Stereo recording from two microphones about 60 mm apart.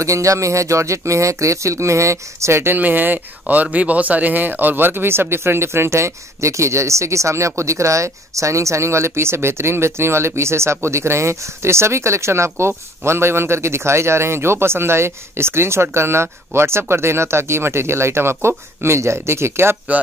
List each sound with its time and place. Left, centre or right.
0.0 s speech: right
2.7 s speech: right